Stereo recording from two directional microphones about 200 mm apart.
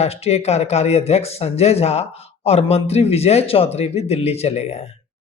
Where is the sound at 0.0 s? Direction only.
30° left (ahead or behind).